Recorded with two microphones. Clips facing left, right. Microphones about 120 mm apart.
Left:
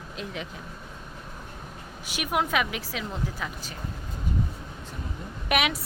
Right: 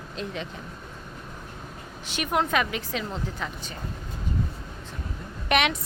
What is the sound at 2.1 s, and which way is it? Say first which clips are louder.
A woman's voice: right 2 dB; 5° left (ahead or behind).